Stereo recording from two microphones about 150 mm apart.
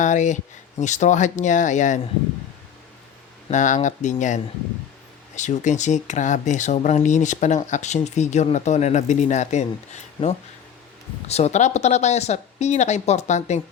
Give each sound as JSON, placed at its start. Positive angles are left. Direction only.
{"t": 0.0, "sound": "speech", "side_deg": 55}
{"t": 3.5, "sound": "speech", "side_deg": 55}
{"t": 5.4, "sound": "speech", "side_deg": 50}